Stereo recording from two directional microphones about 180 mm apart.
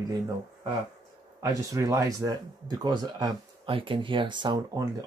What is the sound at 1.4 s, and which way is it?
Speech, 20° right (ahead or behind).